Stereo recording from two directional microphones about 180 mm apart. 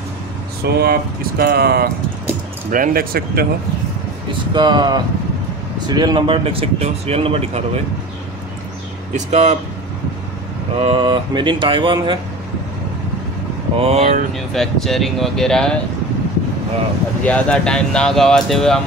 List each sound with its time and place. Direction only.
0.7 s speech: 60° right (ahead or behind)
2.7 s speech: 50° right (ahead or behind)
4.3 s speech: 25° right (ahead or behind)
9.1 s speech: 40° right (ahead or behind)
10.8 s speech: 30° right (ahead or behind)
13.7 s speech: 35° right (ahead or behind)
14.5 s speech: centre (ahead or behind)
17.2 s speech: 5° left (ahead or behind)